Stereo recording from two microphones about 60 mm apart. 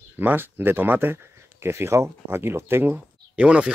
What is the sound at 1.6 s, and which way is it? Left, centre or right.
Speech, right.